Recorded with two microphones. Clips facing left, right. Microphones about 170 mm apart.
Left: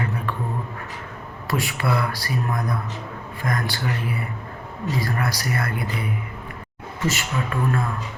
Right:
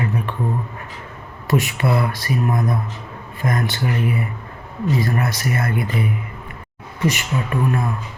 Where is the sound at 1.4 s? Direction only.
20° right (ahead or behind).